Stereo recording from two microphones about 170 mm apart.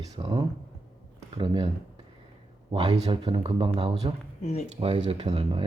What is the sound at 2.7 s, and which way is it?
Speech, 30° right (ahead or behind).